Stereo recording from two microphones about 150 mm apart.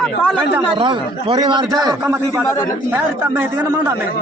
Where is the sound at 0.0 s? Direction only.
5° left (ahead or behind).